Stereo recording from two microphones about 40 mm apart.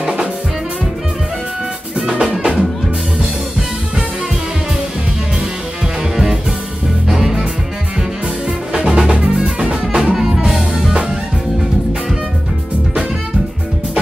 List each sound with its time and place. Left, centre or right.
2.0 s drum: centre
7.1 s music: centre
8.7 s music: centre
9.4 s drum kit: right
10.1 s music: centre